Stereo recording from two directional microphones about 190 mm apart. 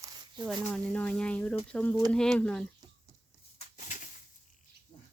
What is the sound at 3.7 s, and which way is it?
Bird, 40° left (ahead or behind).